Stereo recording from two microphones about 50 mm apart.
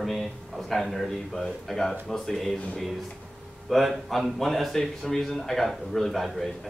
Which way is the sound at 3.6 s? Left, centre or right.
Centre.